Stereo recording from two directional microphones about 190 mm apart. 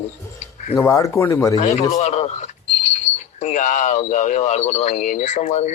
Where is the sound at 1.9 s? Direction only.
35° left (ahead or behind).